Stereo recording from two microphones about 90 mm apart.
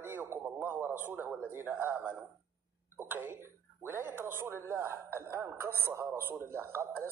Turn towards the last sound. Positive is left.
turn(degrees=-25)  # may be behind; listen again after turning